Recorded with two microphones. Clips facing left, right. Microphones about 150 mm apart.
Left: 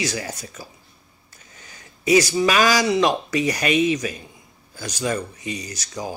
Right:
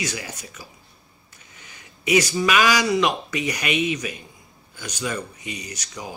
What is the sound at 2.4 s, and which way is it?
Speech, 35° left (ahead or behind).